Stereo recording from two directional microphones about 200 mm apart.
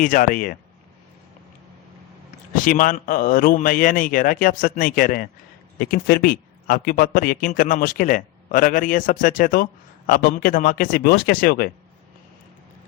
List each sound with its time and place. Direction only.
0.0 s speech: 40° left (ahead or behind)
2.6 s speech: 45° left (ahead or behind)